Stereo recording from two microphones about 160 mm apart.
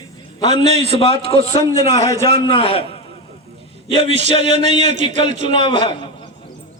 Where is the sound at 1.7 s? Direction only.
20° left (ahead or behind).